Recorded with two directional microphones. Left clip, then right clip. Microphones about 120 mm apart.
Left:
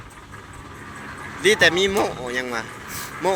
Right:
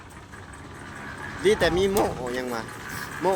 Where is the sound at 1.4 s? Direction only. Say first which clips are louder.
Left 5 dB; 20° right (ahead or behind).